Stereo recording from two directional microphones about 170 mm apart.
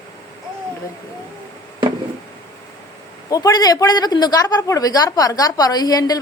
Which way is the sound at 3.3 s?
20° left (ahead or behind).